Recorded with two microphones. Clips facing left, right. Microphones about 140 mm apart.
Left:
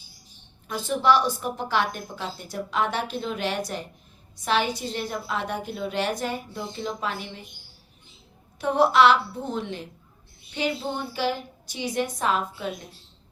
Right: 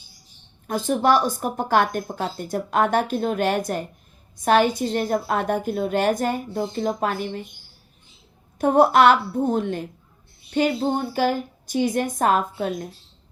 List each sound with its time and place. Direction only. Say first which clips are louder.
0.7 s speech: right 3 dB; 45° right (ahead or behind)
8.5 s speech: right 4 dB; 45° right (ahead or behind)